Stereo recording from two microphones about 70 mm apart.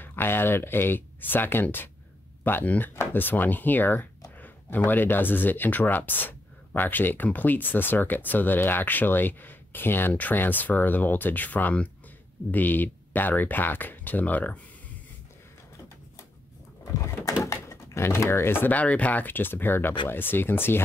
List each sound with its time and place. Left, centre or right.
0.0 s speech: left
17.0 s speech: left